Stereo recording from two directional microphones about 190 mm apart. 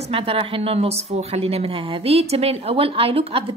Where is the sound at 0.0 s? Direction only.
30° right (ahead or behind).